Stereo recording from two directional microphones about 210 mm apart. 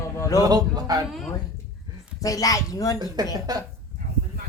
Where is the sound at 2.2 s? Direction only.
15° left (ahead or behind).